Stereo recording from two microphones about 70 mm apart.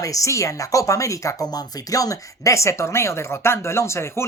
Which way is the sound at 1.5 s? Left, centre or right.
Left.